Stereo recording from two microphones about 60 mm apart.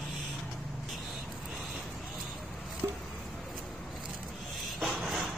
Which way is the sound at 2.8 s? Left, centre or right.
Right.